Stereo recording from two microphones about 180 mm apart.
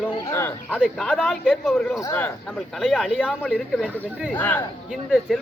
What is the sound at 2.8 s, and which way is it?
Speech, centre (ahead or behind).